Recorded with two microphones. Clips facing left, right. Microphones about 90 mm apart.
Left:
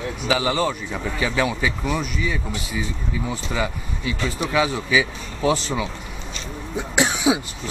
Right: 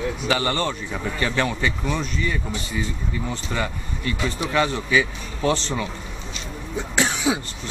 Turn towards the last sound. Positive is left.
turn(degrees=15)  # may be behind; listen again after turning